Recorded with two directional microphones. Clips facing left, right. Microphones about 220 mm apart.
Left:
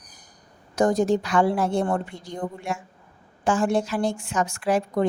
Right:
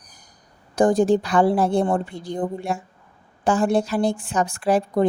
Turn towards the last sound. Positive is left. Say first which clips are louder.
# right 3 dB
turn(degrees=-35)  # may be behind; listen again after turning